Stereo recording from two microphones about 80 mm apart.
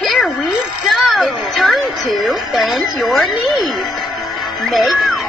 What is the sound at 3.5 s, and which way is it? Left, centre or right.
Music, centre.